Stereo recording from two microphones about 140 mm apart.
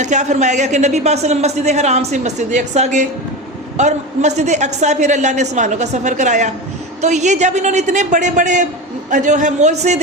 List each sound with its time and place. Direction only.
0.0 s a woman's voice: 60° right (ahead or behind)